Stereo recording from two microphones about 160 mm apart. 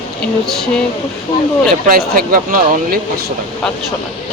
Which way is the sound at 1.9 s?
65° right (ahead or behind).